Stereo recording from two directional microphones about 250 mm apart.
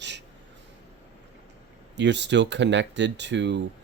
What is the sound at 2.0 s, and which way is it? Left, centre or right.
Speech, right.